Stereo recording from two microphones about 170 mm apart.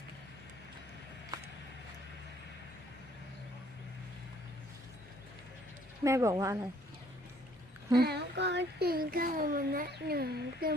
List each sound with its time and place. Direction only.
1.3 s a sound: 20° right (ahead or behind)
6.0 s speech: 20° right (ahead or behind)
7.9 s speech: 75° right (ahead or behind)